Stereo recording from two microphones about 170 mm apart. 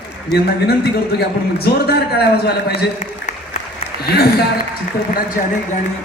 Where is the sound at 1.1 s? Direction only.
70° left (ahead or behind).